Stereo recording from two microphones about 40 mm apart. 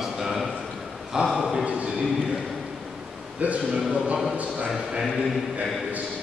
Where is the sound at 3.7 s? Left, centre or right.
Centre.